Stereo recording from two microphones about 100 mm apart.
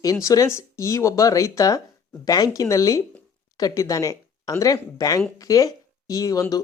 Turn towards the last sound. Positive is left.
turn(degrees=35)  # may be behind; listen again after turning